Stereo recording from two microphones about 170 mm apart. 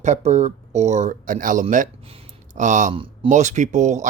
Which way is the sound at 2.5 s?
45° right (ahead or behind).